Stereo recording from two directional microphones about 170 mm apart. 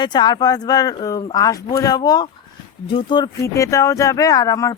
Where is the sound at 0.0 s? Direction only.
25° left (ahead or behind).